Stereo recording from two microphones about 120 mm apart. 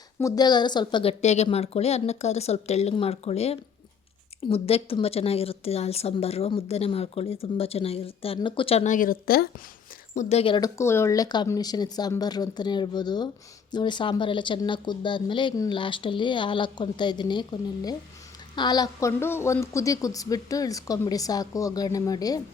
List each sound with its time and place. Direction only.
0.2 s speech: 30° left (ahead or behind)
1.2 s speech: 70° left (ahead or behind)
1.5 s a woman's voice: 60° left (ahead or behind)
10.2 s a woman's voice: 65° left (ahead or behind)
10.6 s a woman's voice: 25° left (ahead or behind); by 17.4 s 40° left (ahead or behind)
18.5 s a woman's voice: 35° left (ahead or behind)